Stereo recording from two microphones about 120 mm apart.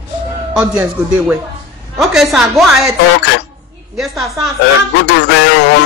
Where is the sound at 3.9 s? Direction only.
Centre (ahead or behind).